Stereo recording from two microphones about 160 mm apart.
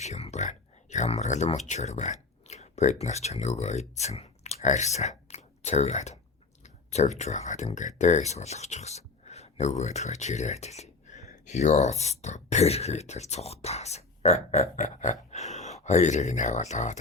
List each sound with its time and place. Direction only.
0.0 s speech: 45° left (ahead or behind)